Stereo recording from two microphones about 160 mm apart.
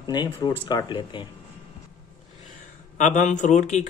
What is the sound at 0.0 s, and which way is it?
Speech, 25° left (ahead or behind).